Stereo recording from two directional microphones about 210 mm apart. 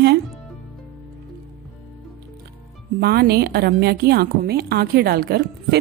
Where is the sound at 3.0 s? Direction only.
50° right (ahead or behind).